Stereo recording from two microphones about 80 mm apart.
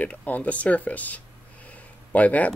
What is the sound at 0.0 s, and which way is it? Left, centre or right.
Speech, centre.